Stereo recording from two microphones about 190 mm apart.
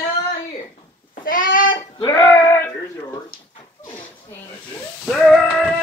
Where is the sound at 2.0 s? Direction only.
15° left (ahead or behind).